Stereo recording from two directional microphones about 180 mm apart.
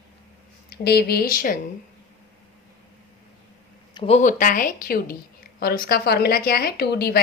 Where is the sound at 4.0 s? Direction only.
35° left (ahead or behind).